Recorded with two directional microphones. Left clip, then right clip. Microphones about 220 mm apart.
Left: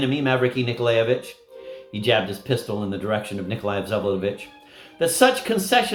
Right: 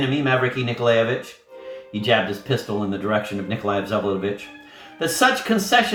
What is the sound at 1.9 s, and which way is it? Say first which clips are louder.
Speech: right 1 dB; 50° left (ahead or behind).